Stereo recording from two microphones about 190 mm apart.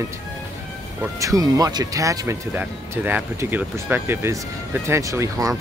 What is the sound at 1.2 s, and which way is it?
Speech, 20° right (ahead or behind).